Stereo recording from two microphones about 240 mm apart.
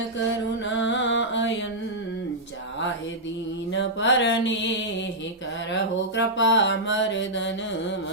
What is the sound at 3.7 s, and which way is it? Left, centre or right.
Mantra, left.